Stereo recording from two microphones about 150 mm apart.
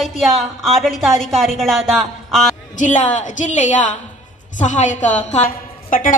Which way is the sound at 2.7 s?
55° left (ahead or behind).